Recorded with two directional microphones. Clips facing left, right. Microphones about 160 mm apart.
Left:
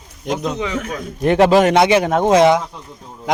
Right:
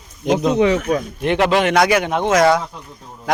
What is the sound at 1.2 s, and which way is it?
Speech, 40° left (ahead or behind).